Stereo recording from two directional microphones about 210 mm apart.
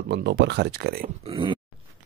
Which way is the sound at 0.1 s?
50° right (ahead or behind).